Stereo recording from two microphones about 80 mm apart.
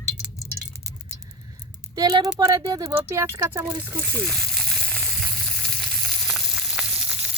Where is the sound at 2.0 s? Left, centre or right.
Right.